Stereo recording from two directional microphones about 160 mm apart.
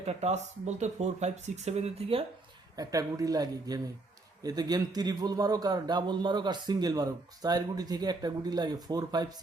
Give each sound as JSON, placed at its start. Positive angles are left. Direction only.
{"t": 0.0, "sound": "speech", "side_deg": -40}
{"t": 2.7, "sound": "a man's voice", "side_deg": -20}